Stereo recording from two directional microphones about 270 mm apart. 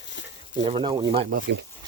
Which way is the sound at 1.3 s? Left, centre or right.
Right.